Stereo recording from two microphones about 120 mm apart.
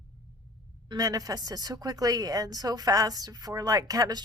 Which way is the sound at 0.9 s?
30° right (ahead or behind).